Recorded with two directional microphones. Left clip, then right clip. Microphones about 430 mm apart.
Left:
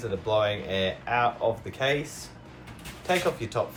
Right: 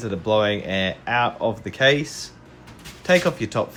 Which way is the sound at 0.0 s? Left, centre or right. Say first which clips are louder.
Right 5 dB; centre.